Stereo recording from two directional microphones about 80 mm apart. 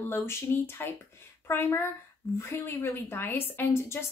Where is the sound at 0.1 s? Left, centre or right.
Left.